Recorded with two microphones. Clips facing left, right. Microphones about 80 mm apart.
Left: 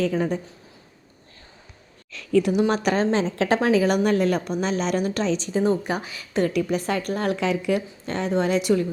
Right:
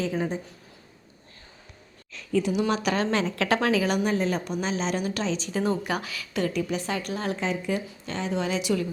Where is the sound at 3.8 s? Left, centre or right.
Left.